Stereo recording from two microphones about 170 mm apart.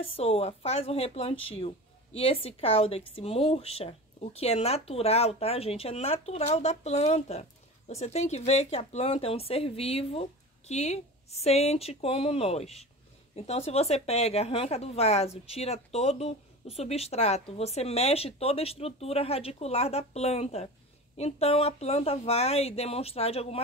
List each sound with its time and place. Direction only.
0.0 s a woman's voice: 35° left (ahead or behind)